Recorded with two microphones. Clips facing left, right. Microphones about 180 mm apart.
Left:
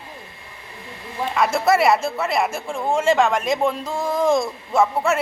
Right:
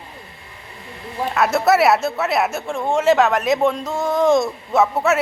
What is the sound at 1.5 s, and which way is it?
Speech, centre (ahead or behind).